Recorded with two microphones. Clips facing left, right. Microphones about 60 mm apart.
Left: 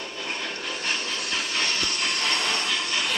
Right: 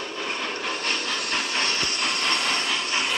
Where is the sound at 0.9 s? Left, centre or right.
Right.